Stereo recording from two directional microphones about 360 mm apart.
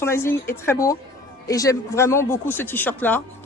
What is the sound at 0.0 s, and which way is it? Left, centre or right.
Speech, centre.